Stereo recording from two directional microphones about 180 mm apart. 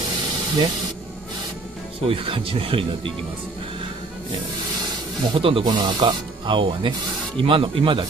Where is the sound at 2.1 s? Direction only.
30° right (ahead or behind).